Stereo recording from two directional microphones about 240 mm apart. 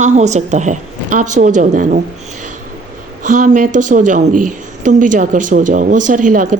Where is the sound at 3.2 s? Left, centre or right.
Right.